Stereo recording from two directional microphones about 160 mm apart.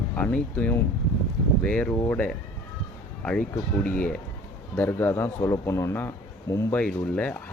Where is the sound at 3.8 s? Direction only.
10° left (ahead or behind).